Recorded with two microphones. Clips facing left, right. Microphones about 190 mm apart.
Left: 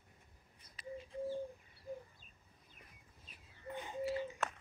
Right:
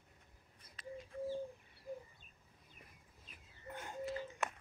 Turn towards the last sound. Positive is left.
turn(degrees=10)  # may be behind; listen again after turning